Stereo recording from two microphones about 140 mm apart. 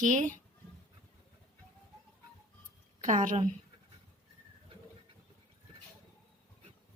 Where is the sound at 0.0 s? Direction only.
65° right (ahead or behind).